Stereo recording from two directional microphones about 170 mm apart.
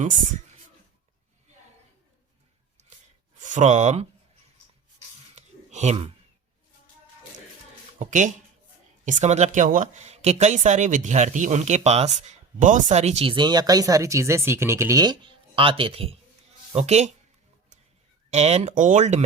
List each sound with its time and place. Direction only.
0.0 s speech: 50° right (ahead or behind)
3.3 s speech: 45° right (ahead or behind)
5.3 s a sound: 40° right (ahead or behind)
7.9 s speech: 45° right (ahead or behind)
18.3 s speech: 40° right (ahead or behind)